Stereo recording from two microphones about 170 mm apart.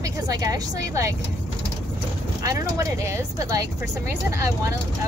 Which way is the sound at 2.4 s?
20° right (ahead or behind).